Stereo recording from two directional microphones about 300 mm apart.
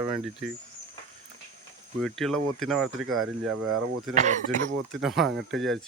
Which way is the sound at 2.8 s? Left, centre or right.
Right.